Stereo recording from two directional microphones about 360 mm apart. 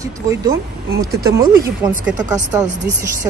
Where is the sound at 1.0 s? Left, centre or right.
Centre.